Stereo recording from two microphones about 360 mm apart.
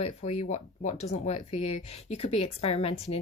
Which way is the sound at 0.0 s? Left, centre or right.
Centre.